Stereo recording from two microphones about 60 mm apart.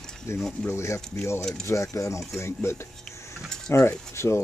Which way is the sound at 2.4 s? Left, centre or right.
Left.